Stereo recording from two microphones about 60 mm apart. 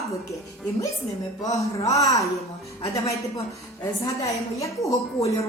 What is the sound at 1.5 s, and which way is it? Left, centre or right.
A man's voice, left.